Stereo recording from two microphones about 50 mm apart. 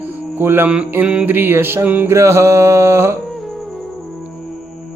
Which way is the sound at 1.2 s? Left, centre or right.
Right.